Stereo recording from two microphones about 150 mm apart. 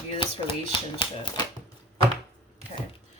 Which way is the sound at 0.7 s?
35° left (ahead or behind).